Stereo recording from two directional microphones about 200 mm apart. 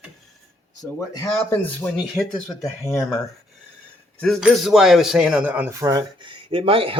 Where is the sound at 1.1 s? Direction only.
15° left (ahead or behind).